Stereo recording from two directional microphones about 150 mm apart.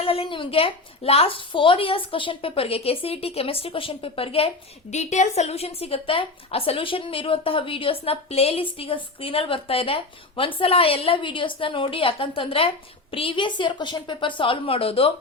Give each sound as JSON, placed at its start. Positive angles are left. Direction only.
{"t": 0.0, "sound": "a woman's voice", "side_deg": 40}